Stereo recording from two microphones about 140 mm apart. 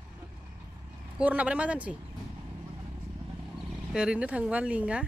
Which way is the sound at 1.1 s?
10° right (ahead or behind).